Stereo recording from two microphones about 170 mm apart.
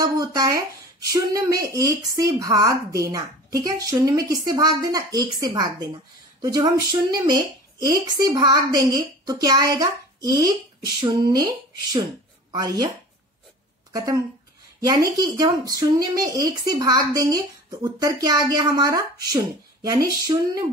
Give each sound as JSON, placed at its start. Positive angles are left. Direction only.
{"t": 0.0, "sound": "speech", "side_deg": -20}
{"t": 12.4, "sound": "speech", "side_deg": -25}
{"t": 13.9, "sound": "speech", "side_deg": -20}